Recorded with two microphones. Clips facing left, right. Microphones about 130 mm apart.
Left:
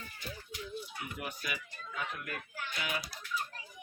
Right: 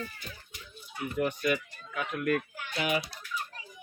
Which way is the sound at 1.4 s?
65° right (ahead or behind).